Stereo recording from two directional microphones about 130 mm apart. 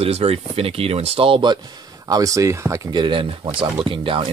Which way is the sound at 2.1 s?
25° right (ahead or behind).